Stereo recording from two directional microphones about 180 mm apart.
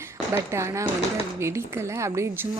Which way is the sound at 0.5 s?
15° right (ahead or behind).